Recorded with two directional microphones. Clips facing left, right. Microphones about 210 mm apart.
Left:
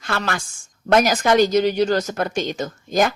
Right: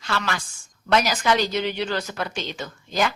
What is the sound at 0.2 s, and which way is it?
A woman's voice, 45° left (ahead or behind).